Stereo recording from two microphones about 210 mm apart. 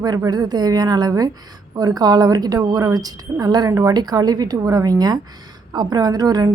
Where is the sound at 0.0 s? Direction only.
20° right (ahead or behind).